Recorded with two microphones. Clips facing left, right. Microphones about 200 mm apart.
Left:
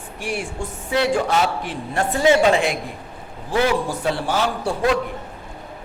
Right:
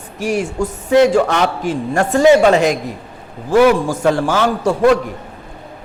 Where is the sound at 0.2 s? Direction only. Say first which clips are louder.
Right 9 dB; 40° right (ahead or behind).